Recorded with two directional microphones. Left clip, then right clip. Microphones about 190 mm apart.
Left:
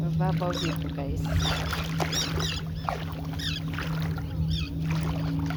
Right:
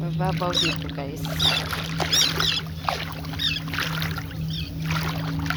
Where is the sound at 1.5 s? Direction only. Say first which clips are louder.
Right 5 dB; 25° right (ahead or behind).